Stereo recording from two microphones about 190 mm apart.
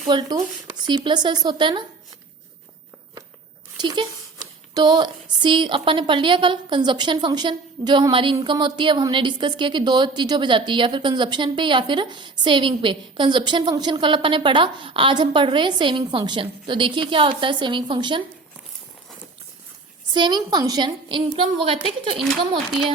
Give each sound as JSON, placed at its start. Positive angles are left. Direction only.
{"t": 0.1, "sound": "a woman's voice", "side_deg": -20}
{"t": 3.8, "sound": "a woman's voice", "side_deg": -25}
{"t": 20.1, "sound": "a woman's voice", "side_deg": -25}